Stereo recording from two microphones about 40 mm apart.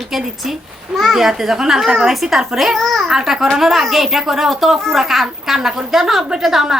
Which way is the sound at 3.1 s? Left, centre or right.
Centre.